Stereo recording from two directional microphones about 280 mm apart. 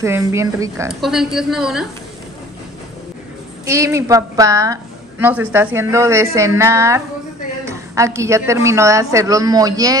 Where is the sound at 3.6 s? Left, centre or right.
Centre.